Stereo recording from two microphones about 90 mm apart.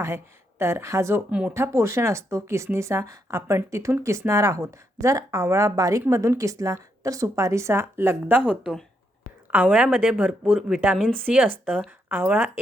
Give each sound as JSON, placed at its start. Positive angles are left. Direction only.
{"t": 0.6, "sound": "a woman's voice", "side_deg": -30}
{"t": 1.3, "sound": "speech", "side_deg": -10}
{"t": 1.5, "sound": "a woman's voice", "side_deg": -30}
{"t": 10.9, "sound": "speech", "side_deg": 0}
{"t": 11.3, "sound": "speech", "side_deg": -20}